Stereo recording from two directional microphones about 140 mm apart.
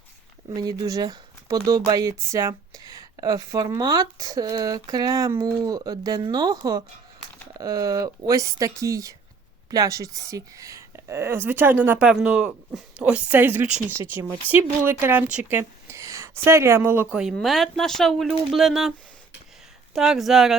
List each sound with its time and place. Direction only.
0.5 s a woman's voice: 30° right (ahead or behind); by 20.6 s centre (ahead or behind)